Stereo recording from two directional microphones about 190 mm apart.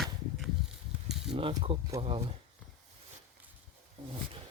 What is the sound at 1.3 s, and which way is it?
Speech, 25° right (ahead or behind).